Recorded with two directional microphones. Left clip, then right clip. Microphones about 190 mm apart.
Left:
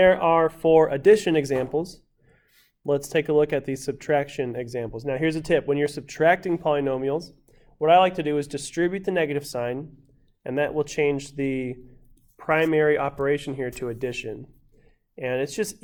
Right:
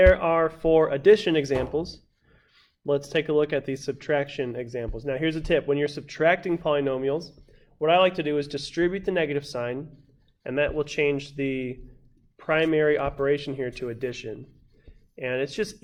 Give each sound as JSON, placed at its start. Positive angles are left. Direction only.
{"t": 0.0, "sound": "speech", "side_deg": 35}
{"t": 12.4, "sound": "speech", "side_deg": 25}
{"t": 13.9, "sound": "speech", "side_deg": 40}